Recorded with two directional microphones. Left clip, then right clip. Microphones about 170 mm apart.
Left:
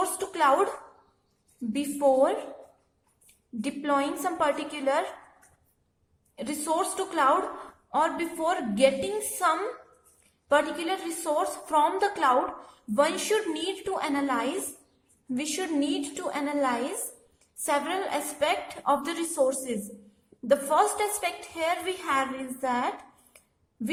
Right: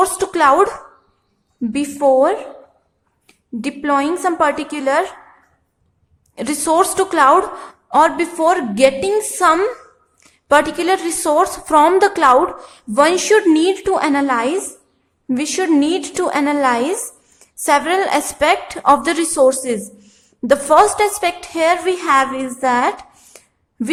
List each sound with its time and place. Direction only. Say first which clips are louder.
0.0 s a woman's voice: right 11 dB; 25° right (ahead or behind)
1.7 s a woman's voice: right 10 dB; 25° right (ahead or behind)
6.3 s a woman's voice: right 13 dB; 30° right (ahead or behind)